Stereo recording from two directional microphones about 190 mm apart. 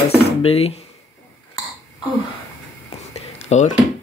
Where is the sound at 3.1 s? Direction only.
35° left (ahead or behind).